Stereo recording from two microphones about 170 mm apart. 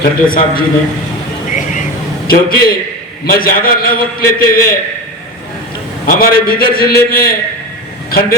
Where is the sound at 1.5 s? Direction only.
50° left (ahead or behind).